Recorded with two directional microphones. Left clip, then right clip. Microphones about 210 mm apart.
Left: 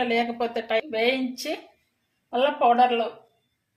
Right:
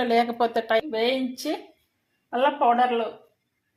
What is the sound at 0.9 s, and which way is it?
Speech, 10° right (ahead or behind).